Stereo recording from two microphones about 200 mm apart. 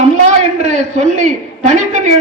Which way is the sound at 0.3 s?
35° right (ahead or behind).